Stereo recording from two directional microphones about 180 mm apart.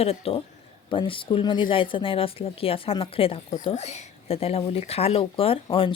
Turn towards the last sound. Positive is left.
turn(degrees=30)  # may be behind; listen again after turning